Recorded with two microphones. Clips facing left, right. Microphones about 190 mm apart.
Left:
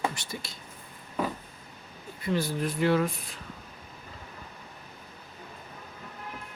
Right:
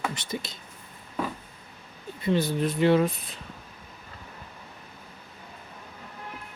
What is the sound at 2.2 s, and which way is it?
Speech, 20° right (ahead or behind).